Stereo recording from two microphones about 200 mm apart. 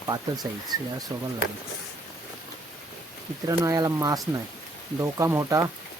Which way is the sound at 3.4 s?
15° right (ahead or behind).